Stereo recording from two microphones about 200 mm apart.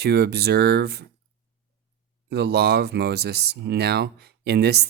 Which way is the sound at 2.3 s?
55° right (ahead or behind).